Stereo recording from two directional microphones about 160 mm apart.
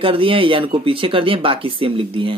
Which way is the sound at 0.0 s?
35° right (ahead or behind).